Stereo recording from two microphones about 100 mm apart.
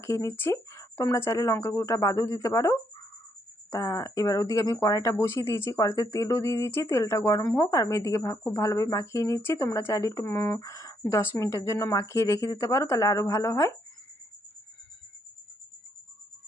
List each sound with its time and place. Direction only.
0.0 s speech: 30° left (ahead or behind)